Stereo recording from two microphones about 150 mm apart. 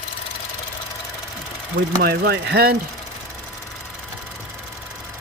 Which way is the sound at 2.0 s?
90° right.